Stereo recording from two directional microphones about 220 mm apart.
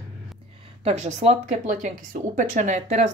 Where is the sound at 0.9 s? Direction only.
30° right (ahead or behind).